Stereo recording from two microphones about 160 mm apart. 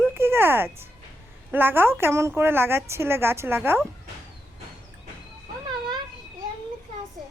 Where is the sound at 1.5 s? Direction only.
15° right (ahead or behind).